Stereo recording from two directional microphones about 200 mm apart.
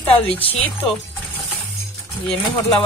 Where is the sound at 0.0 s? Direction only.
5° left (ahead or behind).